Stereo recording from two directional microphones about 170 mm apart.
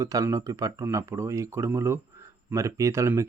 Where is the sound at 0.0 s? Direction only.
20° right (ahead or behind).